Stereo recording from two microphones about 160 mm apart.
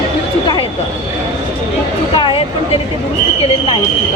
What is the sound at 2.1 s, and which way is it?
Speech, 30° left (ahead or behind).